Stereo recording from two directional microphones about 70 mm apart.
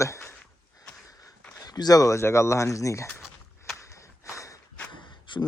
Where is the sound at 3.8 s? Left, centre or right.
Left.